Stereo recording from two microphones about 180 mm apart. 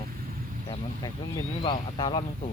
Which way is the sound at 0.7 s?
25° left (ahead or behind).